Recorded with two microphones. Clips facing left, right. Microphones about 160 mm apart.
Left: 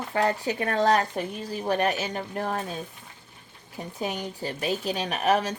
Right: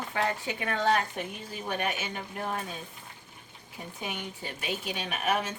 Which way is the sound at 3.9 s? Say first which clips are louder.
Left 7 dB; 40° left (ahead or behind).